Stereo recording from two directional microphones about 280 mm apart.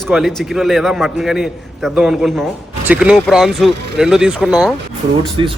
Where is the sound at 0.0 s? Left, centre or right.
Centre.